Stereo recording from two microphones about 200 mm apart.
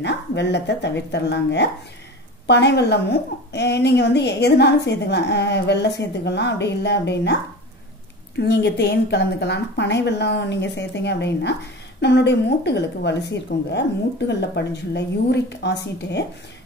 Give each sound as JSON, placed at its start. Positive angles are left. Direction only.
{"t": 0.0, "sound": "a woman's voice", "side_deg": 60}
{"t": 8.4, "sound": "a woman's voice", "side_deg": 55}